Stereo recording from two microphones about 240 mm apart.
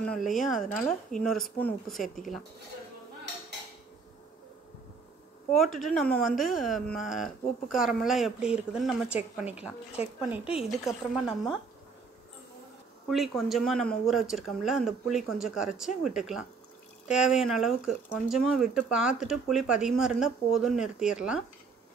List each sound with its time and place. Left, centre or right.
0.0 s speech: centre
5.6 s speech: centre
10.4 s speech: left
13.1 s speech: centre